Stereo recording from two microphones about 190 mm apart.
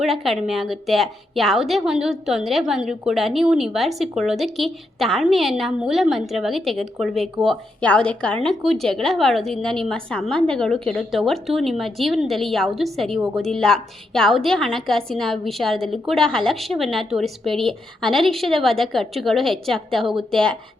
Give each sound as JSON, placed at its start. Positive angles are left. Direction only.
{"t": 0.0, "sound": "a woman's voice", "side_deg": 0}